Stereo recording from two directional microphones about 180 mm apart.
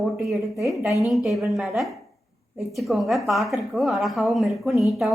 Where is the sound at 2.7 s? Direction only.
Centre (ahead or behind).